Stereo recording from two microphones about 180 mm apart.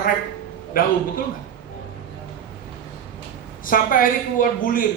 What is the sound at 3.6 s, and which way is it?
A man's voice, 50° left (ahead or behind).